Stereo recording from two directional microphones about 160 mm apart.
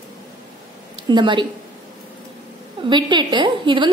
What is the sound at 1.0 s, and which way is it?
Speech, 30° right (ahead or behind).